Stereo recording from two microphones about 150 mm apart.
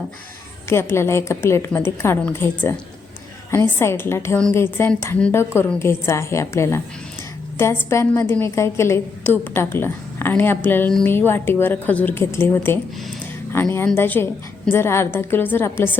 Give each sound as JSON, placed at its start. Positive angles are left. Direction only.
{"t": 0.7, "sound": "a woman's voice", "side_deg": 15}